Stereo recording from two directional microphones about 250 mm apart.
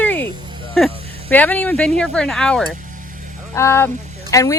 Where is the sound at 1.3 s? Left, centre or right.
Centre.